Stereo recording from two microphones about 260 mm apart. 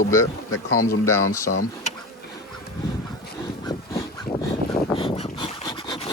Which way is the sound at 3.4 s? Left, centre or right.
Centre.